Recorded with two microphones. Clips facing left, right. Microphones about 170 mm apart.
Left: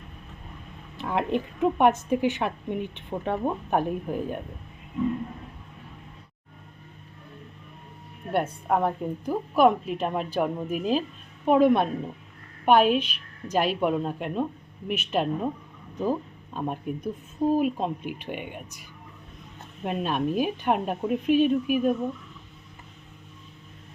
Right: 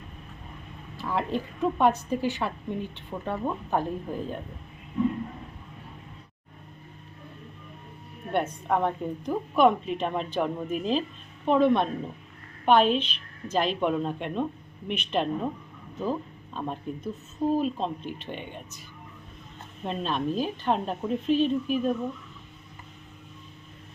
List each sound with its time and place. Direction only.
0.9 s a woman's voice: 20° left (ahead or behind)
8.3 s a woman's voice: 5° left (ahead or behind)
16.6 s a woman's voice: 10° left (ahead or behind)
19.8 s a woman's voice: 10° left (ahead or behind)